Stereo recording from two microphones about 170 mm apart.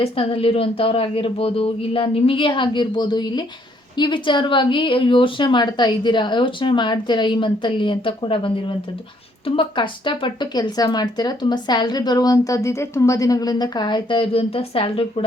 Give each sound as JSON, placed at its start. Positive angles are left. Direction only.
{"t": 0.0, "sound": "speech", "side_deg": 35}
{"t": 9.6, "sound": "speech", "side_deg": 30}